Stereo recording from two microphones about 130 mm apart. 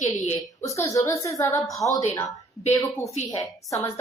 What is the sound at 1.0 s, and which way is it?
A woman's voice, 25° left (ahead or behind).